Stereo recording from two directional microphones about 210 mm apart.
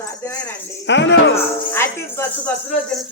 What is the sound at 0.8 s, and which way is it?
Speech, 60° left (ahead or behind).